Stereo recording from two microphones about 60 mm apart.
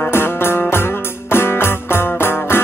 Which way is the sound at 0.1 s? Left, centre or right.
Left.